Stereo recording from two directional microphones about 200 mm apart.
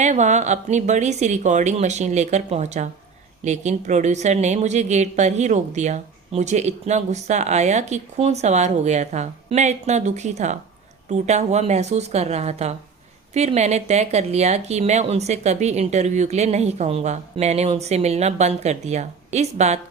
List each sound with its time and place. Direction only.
0.0 s a woman's voice: 35° right (ahead or behind)